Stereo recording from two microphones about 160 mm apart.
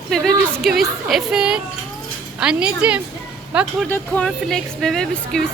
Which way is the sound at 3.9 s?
5° left (ahead or behind).